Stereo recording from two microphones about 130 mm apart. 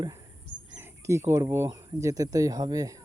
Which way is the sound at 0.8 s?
20° right (ahead or behind).